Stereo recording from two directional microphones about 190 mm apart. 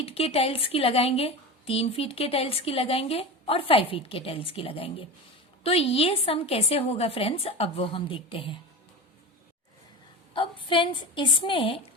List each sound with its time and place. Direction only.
0.0 s speech: 30° left (ahead or behind)
10.3 s speech: 25° left (ahead or behind)